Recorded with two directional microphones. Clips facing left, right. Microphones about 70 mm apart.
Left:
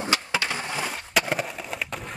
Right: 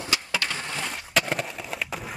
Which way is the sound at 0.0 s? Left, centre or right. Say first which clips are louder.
Left 3 dB; left.